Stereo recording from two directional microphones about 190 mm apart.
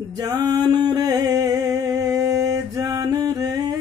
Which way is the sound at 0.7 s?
20° right (ahead or behind).